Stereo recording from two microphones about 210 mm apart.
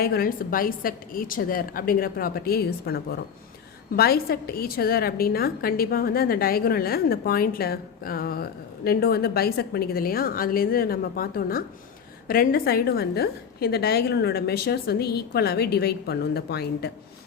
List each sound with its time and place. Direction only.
0.0 s a woman's voice: 45° left (ahead or behind)